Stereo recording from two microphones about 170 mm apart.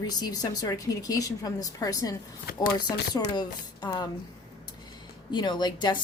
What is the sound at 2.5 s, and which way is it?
Speech, 60° left (ahead or behind).